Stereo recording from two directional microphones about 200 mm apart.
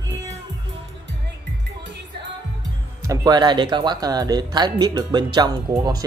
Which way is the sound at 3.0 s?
20° right (ahead or behind).